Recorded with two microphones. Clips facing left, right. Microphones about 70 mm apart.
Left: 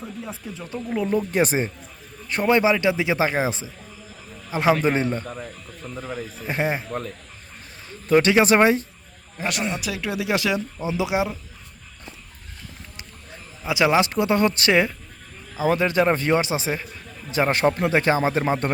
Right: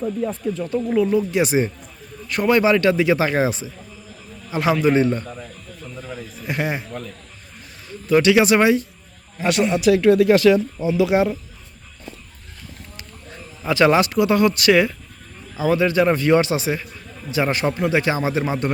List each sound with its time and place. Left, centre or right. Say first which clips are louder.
0.3 s speech: right 10 dB; centre
1.3 s speech: right 2 dB; left
2.3 s speech: right 2 dB; left
7.9 s speech: right 2 dB; left
9.4 s speech: right 8 dB; centre
13.7 s speech: right 3 dB; centre
14.0 s speech: right 3 dB; left